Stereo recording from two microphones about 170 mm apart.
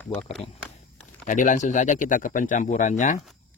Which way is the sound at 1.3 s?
50° left (ahead or behind).